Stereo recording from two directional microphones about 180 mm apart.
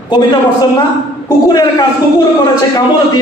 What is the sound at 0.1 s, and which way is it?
Speech, 25° left (ahead or behind).